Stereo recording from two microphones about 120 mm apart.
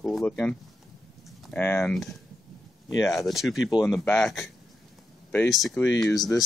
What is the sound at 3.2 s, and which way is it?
Speech, centre (ahead or behind).